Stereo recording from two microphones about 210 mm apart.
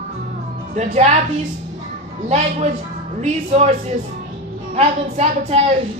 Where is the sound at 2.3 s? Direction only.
30° right (ahead or behind).